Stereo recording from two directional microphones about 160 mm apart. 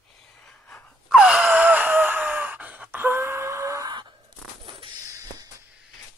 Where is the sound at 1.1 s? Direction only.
5° right (ahead or behind); by 4.1 s 25° right (ahead or behind).